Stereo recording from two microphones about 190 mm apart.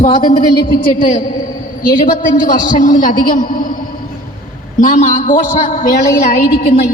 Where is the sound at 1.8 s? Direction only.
45° left (ahead or behind).